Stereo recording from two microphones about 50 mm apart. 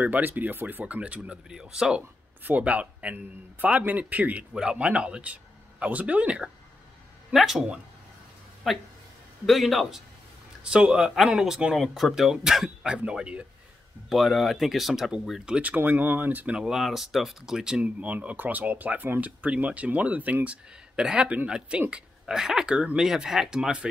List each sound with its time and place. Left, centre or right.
0.0 s speech: right
1.5 s speech: centre
2.4 s speech: right
7.3 s speech: centre
8.6 s speech: centre
10.6 s speech: centre
14.0 s speech: centre
15.6 s speech: right
16.5 s speech: centre
17.8 s speech: right
20.4 s speech: centre